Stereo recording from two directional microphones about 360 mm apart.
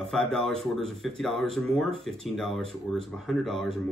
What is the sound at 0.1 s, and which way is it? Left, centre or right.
Speech, centre.